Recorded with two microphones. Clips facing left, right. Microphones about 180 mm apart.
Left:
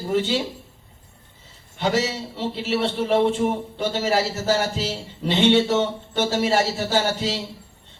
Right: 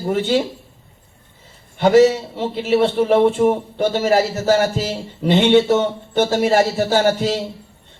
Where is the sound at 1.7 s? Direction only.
55° right (ahead or behind).